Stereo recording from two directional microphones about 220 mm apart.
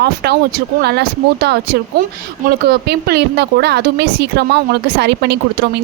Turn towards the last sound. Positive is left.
turn(degrees=-50)  # may be behind; listen again after turning